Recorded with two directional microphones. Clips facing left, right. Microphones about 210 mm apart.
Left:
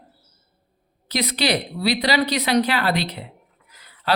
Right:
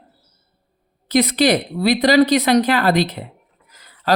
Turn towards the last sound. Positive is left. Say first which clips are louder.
# right 3 dB
turn(degrees=-45)  # may be behind; listen again after turning